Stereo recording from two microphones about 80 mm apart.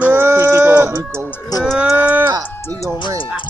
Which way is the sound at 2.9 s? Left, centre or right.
Left.